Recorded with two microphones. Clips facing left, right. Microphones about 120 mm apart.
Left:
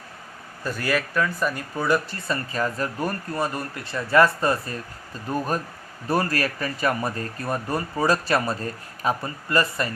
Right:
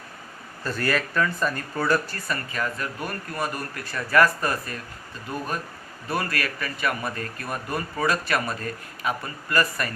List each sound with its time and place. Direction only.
0.6 s speech: 10° left (ahead or behind); by 9.9 s 25° left (ahead or behind)